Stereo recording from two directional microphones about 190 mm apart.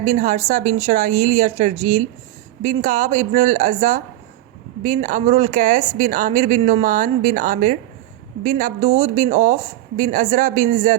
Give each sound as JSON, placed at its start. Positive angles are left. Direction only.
{"t": 0.0, "sound": "a woman's voice", "side_deg": -40}